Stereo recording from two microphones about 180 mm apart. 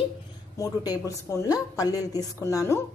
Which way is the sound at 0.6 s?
20° left (ahead or behind).